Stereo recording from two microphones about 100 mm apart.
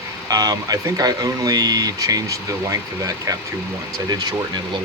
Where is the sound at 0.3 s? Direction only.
40° right (ahead or behind).